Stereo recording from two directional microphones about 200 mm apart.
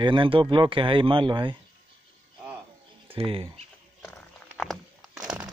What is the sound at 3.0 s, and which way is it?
Speech, 25° right (ahead or behind).